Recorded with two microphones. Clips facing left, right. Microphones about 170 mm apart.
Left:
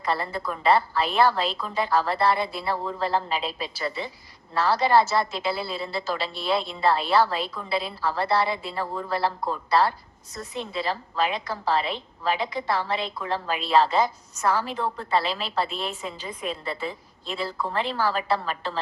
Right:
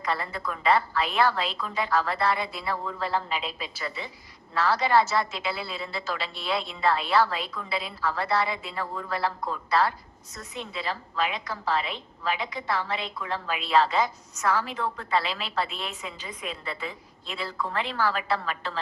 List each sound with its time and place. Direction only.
0.0 s a woman's voice: 30° left (ahead or behind)